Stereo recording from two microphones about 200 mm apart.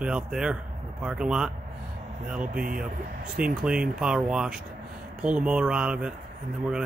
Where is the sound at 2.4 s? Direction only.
45° right (ahead or behind).